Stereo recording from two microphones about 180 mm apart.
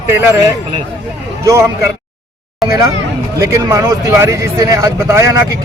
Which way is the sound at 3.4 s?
15° right (ahead or behind).